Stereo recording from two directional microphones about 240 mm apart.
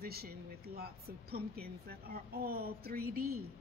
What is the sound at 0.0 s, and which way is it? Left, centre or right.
Speech, right.